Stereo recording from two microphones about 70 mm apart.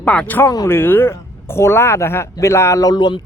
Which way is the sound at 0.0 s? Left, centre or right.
Centre.